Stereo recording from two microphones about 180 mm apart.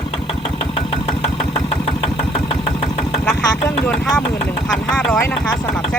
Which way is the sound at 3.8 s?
5° left (ahead or behind).